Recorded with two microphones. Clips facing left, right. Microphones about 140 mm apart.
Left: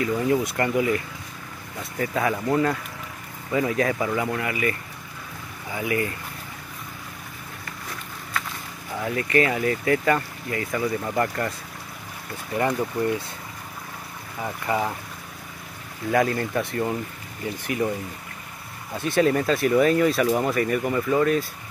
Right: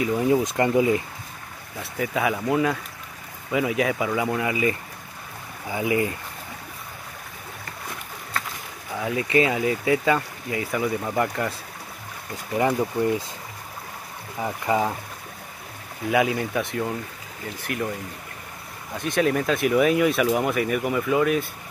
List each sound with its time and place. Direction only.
0.0 s speech: 15° right (ahead or behind)
1.8 s speech: 5° right (ahead or behind); by 6.1 s 20° right (ahead or behind)
9.0 s speech: 15° right (ahead or behind)
12.5 s speech: 15° right (ahead or behind)
14.4 s speech: 15° right (ahead or behind)
16.1 s speech: 10° right (ahead or behind)
18.9 s speech: 5° left (ahead or behind)